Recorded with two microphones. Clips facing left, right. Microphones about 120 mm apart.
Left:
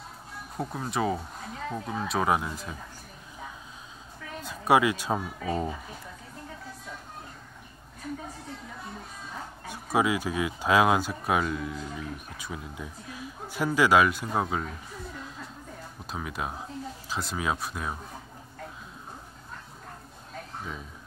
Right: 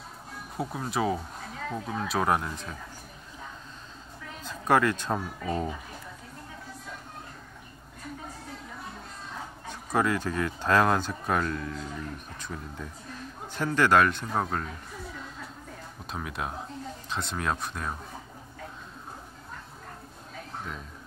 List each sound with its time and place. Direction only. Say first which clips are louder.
0.6 s speech: even; centre (ahead or behind)
4.4 s speech: left 1 dB; 10° left (ahead or behind)
9.7 s speech: left 1 dB; 10° left (ahead or behind)
15.1 s a sound: even; centre (ahead or behind)
16.1 s speech: even; centre (ahead or behind)